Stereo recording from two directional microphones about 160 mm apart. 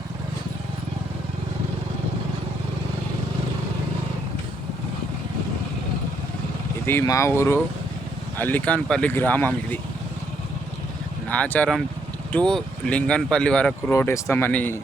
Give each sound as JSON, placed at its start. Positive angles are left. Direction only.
{"t": 6.8, "sound": "speech", "side_deg": 15}
{"t": 11.3, "sound": "speech", "side_deg": 10}
{"t": 13.9, "sound": "speech", "side_deg": 15}